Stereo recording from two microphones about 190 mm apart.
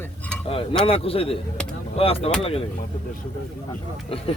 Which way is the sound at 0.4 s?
30° left (ahead or behind).